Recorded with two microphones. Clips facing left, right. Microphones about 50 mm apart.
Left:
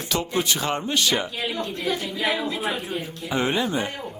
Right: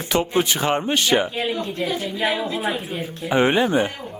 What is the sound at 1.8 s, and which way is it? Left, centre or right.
A woman's voice, centre.